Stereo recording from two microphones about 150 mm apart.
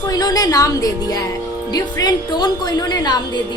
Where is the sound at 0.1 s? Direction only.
25° left (ahead or behind).